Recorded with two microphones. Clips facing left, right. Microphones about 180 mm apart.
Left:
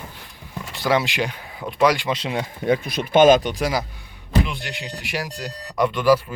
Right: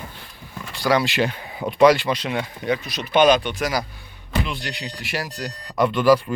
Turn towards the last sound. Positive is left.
turn(degrees=10)  # may be behind; listen again after turning